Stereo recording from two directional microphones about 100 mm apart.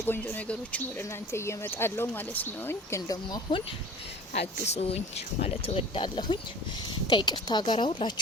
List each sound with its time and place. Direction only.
0.0 s speech: 20° left (ahead or behind)
1.3 s speech: 25° left (ahead or behind)
2.9 s speech: 40° left (ahead or behind)
4.4 s speech: 90° left; by 8.1 s 60° left (ahead or behind)